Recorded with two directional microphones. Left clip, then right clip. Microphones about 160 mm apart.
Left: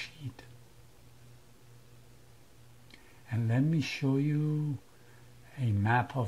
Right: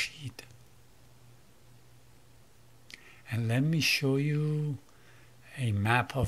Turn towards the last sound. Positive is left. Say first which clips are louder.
# right 1 dB
turn(degrees=-15)  # may be behind; listen again after turning